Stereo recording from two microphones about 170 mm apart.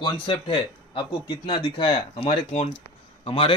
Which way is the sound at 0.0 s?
25° left (ahead or behind).